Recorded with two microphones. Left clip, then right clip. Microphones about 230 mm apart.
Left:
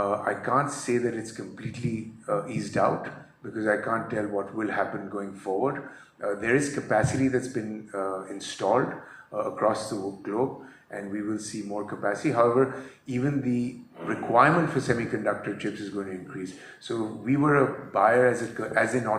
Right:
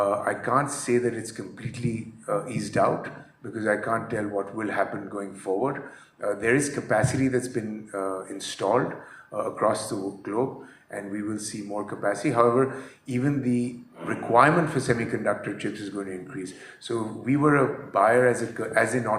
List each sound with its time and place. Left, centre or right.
0.0 s speech: right